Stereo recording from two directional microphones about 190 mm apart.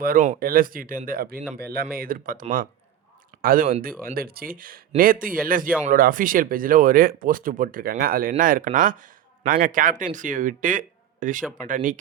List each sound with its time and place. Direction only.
0.0 s speech: 45° right (ahead or behind)